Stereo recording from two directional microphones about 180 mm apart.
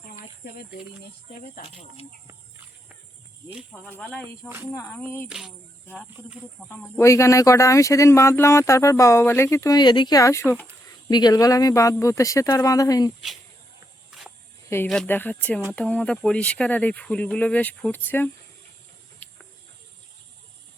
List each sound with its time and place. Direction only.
0.4 s speech: 60° left (ahead or behind)
3.7 s speech: 10° left (ahead or behind)
4.4 s speech: 10° right (ahead or behind)
4.7 s speech: 15° left (ahead or behind)
5.3 s speech: centre (ahead or behind)
6.7 s speech: 15° left (ahead or behind)
14.1 s a sound: centre (ahead or behind)
14.8 s speech: 5° left (ahead or behind)